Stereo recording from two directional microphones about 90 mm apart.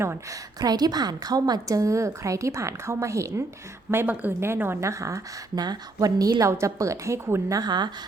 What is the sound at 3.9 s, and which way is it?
A woman's voice, 20° right (ahead or behind).